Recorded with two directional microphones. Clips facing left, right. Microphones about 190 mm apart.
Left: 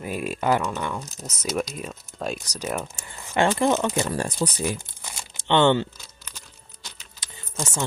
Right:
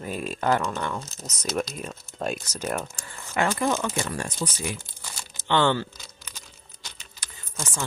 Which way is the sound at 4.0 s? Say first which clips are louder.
Left 5 dB; 30° left (ahead or behind).